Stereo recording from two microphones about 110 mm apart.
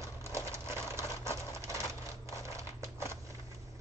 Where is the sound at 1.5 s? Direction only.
25° right (ahead or behind).